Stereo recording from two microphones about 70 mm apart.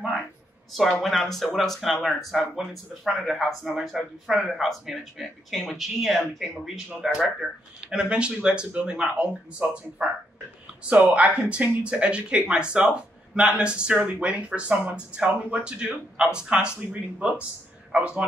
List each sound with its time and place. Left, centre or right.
0.7 s speech: centre
17.9 s speech: centre